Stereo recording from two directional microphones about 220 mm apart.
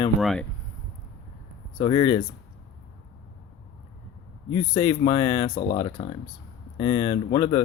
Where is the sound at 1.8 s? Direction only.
20° left (ahead or behind).